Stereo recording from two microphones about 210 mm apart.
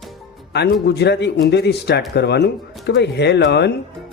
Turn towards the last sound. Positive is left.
turn(degrees=55)  # may be behind; listen again after turning